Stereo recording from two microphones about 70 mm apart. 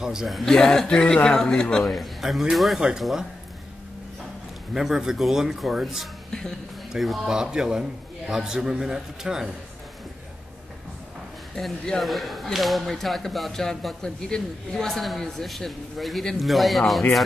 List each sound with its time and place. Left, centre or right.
0.0 s a man's voice: centre
4.7 s a man's voice: centre
11.5 s speech: centre